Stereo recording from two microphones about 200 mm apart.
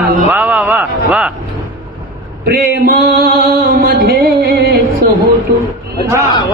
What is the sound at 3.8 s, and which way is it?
Music, 50° right (ahead or behind).